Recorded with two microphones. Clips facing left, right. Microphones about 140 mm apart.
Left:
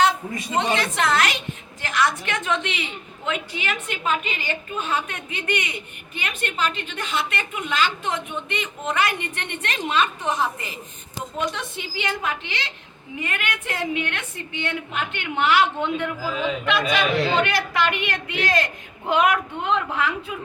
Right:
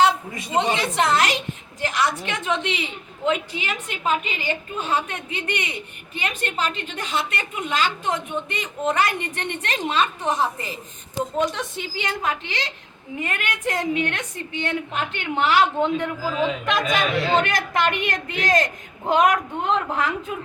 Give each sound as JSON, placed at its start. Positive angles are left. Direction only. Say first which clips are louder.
{"t": 0.9, "sound": "a woman's voice", "louder": "right 2 dB", "side_deg": -35}